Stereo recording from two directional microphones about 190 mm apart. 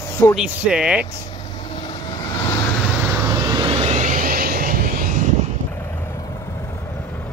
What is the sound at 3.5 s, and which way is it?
Vehicle, 30° right (ahead or behind).